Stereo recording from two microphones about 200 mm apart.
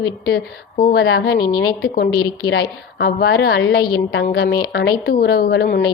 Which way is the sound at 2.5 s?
55° left (ahead or behind).